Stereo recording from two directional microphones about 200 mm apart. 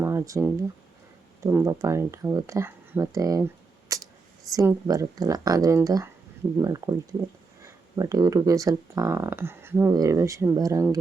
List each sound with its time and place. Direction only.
0.0 s speech: 15° right (ahead or behind)
3.9 s camera: 15° right (ahead or behind)
4.5 s speech: 15° right (ahead or behind)